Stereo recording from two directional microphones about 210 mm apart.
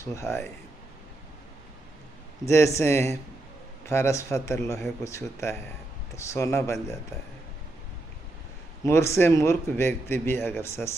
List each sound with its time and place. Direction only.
0.0 s speech: 15° left (ahead or behind)
2.4 s speech: 15° left (ahead or behind)
8.8 s speech: 15° left (ahead or behind)